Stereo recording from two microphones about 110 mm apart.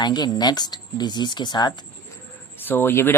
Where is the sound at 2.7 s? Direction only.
20° left (ahead or behind).